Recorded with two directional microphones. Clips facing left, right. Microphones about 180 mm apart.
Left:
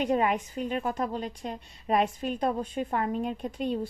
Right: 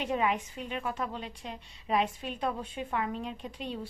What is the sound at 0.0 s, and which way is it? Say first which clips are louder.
A woman's voice: left 4 dB; 45° left (ahead or behind).